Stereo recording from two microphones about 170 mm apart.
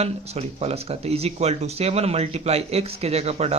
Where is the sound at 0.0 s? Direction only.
40° right (ahead or behind).